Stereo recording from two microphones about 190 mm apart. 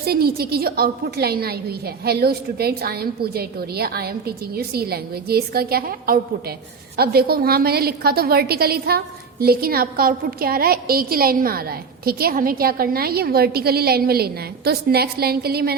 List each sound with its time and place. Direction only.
0.0 s a woman's voice: 55° right (ahead or behind)